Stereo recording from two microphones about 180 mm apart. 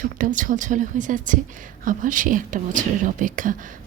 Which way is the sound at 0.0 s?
45° right (ahead or behind).